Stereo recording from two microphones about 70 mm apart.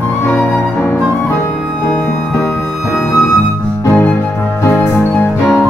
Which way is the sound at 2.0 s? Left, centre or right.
Left.